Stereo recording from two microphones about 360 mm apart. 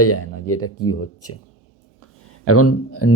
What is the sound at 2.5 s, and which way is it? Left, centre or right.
Speech, left.